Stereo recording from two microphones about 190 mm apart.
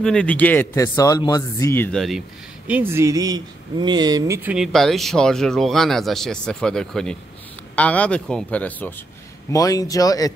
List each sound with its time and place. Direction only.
0.0 s speech: 5° left (ahead or behind)
2.0 s speech: centre (ahead or behind); by 4.4 s 20° right (ahead or behind)
4.4 s speech: 5° right (ahead or behind); by 10.3 s 20° left (ahead or behind)